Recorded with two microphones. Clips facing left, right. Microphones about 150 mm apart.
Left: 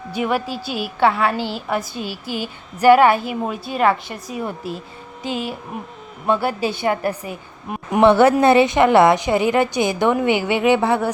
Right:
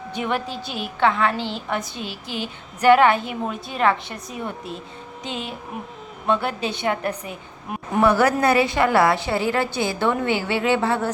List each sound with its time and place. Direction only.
0.1 s a woman's voice: 5° left (ahead or behind)
7.9 s a woman's voice: 25° left (ahead or behind)